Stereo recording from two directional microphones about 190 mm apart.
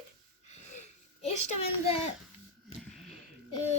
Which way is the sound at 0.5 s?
35° left (ahead or behind).